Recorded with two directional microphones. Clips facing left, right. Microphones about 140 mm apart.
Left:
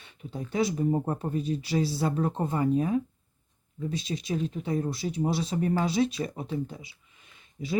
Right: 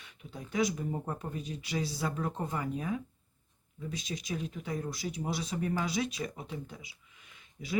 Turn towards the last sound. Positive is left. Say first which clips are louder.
# left 7 dB
turn(degrees=25)  # may be behind; listen again after turning